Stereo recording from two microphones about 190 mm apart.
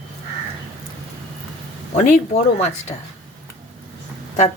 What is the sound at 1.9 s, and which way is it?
Speech, 40° left (ahead or behind).